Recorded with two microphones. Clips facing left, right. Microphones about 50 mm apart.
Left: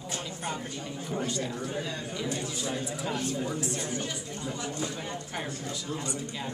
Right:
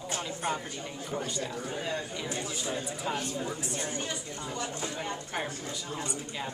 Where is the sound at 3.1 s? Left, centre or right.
Centre.